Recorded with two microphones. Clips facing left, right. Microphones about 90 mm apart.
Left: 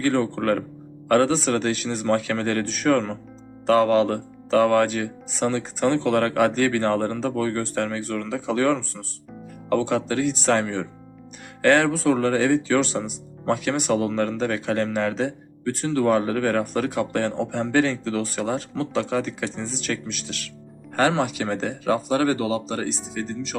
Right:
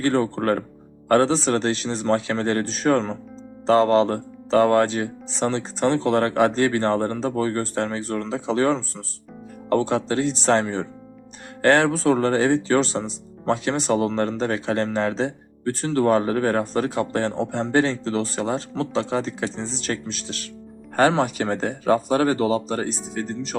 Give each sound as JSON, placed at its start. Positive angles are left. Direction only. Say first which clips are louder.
{"t": 0.0, "sound": "speech", "louder": "right 1 dB", "side_deg": -35}